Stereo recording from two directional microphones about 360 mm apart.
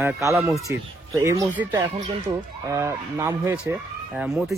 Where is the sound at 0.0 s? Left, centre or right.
Centre.